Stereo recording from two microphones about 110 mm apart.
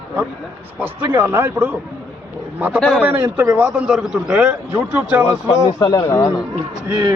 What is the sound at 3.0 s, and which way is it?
A man's voice, 15° right (ahead or behind).